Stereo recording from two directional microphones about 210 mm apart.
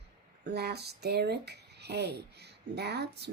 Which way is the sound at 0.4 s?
50° right (ahead or behind).